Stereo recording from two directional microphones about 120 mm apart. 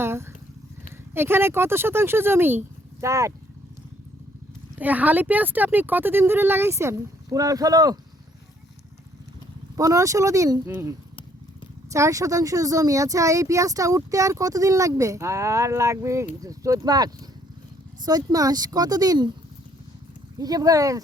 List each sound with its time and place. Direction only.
0.0 s speech: 20° right (ahead or behind)
4.8 s speech: 15° right (ahead or behind); by 7.9 s 30° right (ahead or behind)
9.7 s speech: 30° right (ahead or behind)
20.4 s speech: 30° right (ahead or behind)